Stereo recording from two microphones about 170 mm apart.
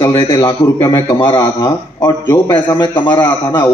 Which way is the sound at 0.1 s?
30° left (ahead or behind).